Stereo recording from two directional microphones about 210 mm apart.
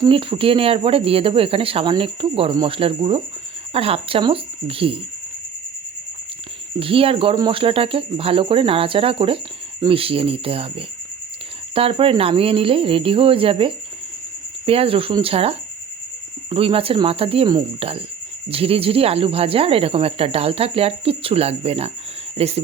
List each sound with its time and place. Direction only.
0.0 s speech: 25° right (ahead or behind)
6.7 s speech: 25° right (ahead or behind)